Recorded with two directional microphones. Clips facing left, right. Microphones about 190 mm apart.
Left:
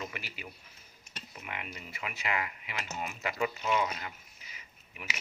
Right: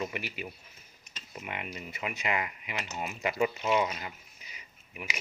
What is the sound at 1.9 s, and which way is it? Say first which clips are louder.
Speech: right 3 dB; 20° right (ahead or behind).